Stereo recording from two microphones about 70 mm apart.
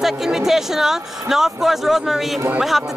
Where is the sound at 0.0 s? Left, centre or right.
Centre.